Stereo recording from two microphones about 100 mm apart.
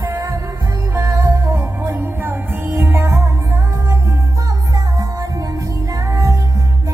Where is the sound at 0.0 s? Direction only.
25° right (ahead or behind).